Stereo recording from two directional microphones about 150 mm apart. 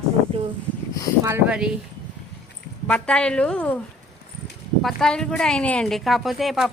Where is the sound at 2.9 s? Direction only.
5° left (ahead or behind).